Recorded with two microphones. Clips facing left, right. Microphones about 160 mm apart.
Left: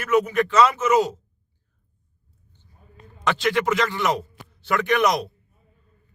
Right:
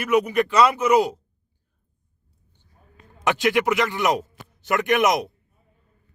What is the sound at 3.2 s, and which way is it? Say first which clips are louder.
A man's voice: right 1 dB; 15° right (ahead or behind).